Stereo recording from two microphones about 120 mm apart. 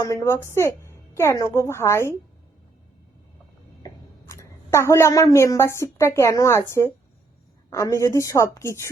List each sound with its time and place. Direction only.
0.0 s speech: 25° left (ahead or behind)
3.8 s a woman's voice: 25° left (ahead or behind)